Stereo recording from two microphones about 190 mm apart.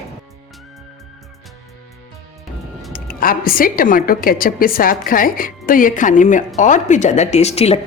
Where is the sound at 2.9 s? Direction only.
50° left (ahead or behind).